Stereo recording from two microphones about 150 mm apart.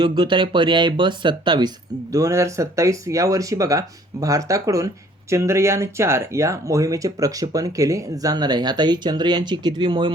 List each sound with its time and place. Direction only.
0.0 s speech: 30° right (ahead or behind)